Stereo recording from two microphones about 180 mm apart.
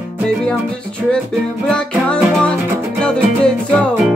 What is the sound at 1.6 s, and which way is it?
Music, 5° left (ahead or behind).